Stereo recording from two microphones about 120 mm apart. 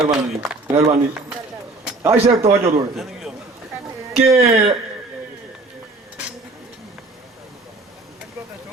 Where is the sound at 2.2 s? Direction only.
55° right (ahead or behind).